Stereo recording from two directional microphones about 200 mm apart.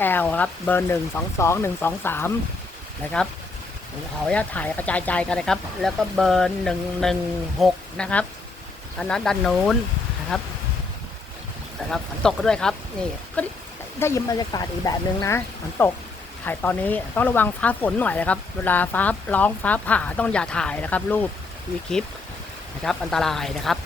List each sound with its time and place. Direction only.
0.0 s speech: 10° left (ahead or behind)
11.9 s speech: 5° left (ahead or behind)
14.0 s speech: 15° left (ahead or behind)
22.8 s speech: centre (ahead or behind)